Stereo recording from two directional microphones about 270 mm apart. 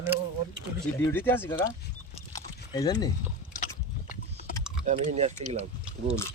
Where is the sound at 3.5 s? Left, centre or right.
Left.